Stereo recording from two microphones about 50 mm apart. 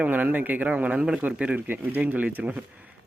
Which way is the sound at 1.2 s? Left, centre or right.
Right.